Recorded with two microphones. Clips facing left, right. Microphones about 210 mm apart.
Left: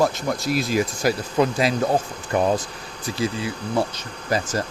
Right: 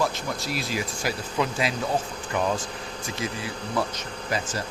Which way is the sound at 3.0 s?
30° left (ahead or behind).